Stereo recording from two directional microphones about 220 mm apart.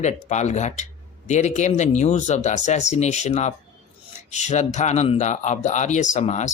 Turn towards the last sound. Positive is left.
turn(degrees=30)  # may be behind; listen again after turning